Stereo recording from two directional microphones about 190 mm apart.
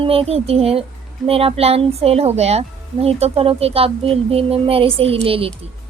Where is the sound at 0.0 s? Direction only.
30° right (ahead or behind).